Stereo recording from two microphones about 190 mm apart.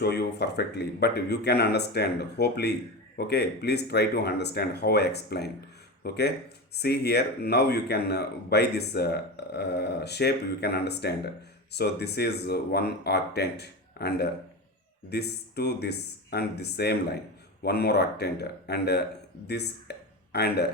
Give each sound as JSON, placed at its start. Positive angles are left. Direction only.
{"t": 0.0, "sound": "speech", "side_deg": 60}